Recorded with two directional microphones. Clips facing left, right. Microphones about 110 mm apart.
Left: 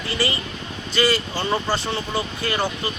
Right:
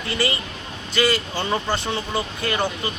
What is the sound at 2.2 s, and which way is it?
Speech, 10° left (ahead or behind).